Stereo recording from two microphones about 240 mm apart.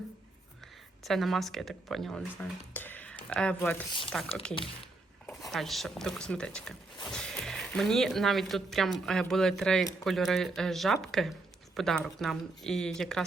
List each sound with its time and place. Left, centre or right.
1.0 s speech: centre